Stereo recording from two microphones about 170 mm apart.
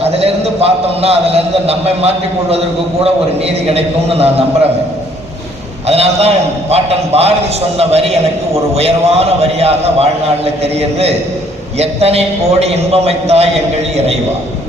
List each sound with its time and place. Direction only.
0.0 s a man's voice: 35° right (ahead or behind)
5.9 s a man's voice: 35° right (ahead or behind)